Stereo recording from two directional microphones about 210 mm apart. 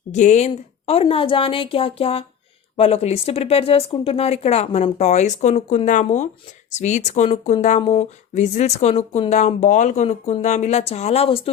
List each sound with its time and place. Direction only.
0.1 s a woman's voice: 35° left (ahead or behind)